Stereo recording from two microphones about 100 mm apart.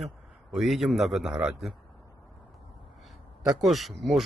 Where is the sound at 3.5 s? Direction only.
Centre (ahead or behind).